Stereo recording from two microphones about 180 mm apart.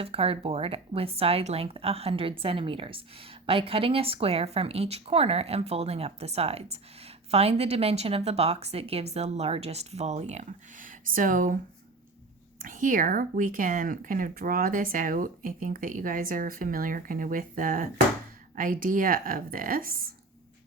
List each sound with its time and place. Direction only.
0.0 s a woman's voice: 30° right (ahead or behind); by 11.5 s 50° right (ahead or behind)
12.6 s speech: 45° right (ahead or behind)